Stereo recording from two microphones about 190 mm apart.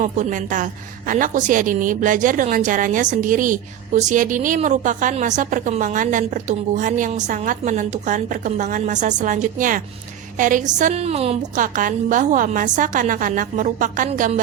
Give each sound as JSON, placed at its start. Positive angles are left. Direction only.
{"t": 0.0, "sound": "a woman's voice", "side_deg": -40}
{"t": 11.6, "sound": "a woman's voice", "side_deg": -45}